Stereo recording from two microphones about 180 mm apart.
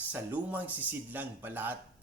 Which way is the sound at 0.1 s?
10° right (ahead or behind).